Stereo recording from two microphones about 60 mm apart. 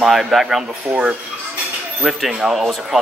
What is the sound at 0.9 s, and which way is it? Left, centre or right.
Speech, right.